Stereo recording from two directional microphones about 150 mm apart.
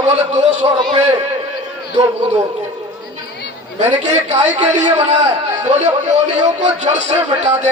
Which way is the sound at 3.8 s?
50° right (ahead or behind).